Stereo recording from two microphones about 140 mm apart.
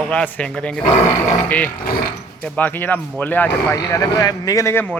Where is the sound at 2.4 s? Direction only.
10° left (ahead or behind).